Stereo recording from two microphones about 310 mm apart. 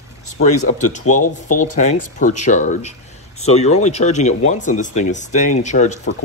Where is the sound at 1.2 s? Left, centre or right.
Left.